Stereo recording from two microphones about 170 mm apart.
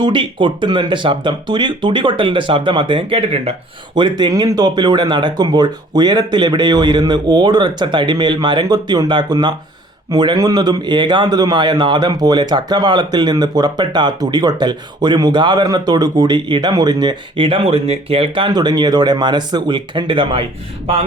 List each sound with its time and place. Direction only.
0.0 s a man's voice: 30° right (ahead or behind)